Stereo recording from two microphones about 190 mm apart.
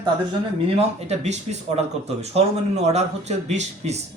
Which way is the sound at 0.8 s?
35° right (ahead or behind).